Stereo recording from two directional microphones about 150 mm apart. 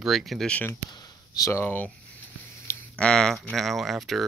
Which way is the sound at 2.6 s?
15° left (ahead or behind).